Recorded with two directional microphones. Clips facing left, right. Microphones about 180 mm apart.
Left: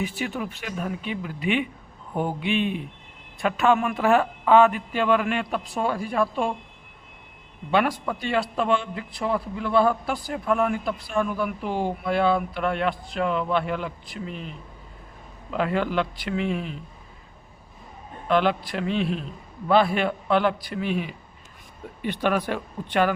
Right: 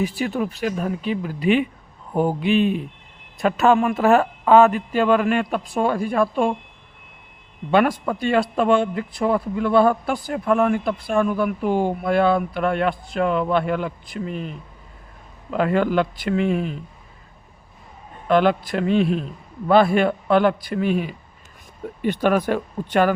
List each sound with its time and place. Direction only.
0.0 s a man's voice: 35° right (ahead or behind); by 6.5 s 55° right (ahead or behind)
7.7 s a man's voice: 50° right (ahead or behind)
15.5 s a man's voice: 50° right (ahead or behind)
18.3 s a man's voice: 45° right (ahead or behind)